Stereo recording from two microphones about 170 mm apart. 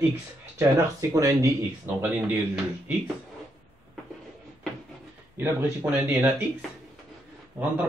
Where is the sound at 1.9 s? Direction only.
10° right (ahead or behind).